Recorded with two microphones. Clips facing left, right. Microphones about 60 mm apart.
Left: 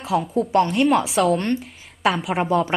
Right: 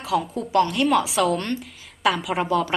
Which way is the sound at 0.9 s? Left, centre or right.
Centre.